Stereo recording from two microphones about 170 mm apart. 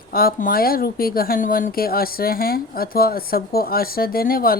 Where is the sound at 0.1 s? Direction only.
60° left (ahead or behind).